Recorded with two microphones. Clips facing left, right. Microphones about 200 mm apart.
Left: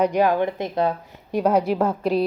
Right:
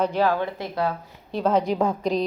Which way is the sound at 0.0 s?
15° left (ahead or behind).